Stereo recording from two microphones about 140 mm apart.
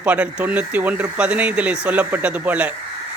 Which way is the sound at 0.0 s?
10° right (ahead or behind).